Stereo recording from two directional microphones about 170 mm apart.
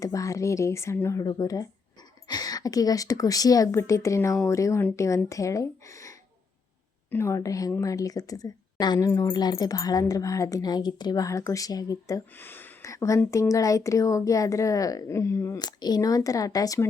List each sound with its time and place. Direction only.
0.0 s speech: 20° left (ahead or behind)